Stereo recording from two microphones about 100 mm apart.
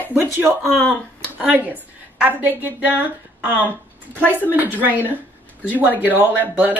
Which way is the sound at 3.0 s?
15° right (ahead or behind).